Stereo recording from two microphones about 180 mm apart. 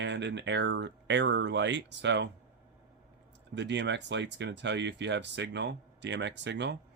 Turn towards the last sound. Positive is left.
turn(degrees=-75)  # may be behind; listen again after turning